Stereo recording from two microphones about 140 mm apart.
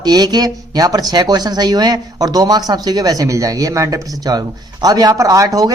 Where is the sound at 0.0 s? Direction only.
30° right (ahead or behind).